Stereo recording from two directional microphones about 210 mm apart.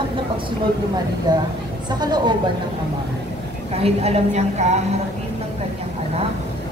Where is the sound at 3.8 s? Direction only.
30° right (ahead or behind).